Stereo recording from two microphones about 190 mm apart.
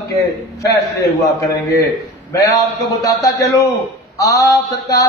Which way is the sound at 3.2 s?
20° left (ahead or behind).